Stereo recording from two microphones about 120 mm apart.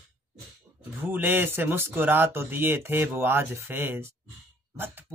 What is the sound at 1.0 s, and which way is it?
Speech, 15° right (ahead or behind).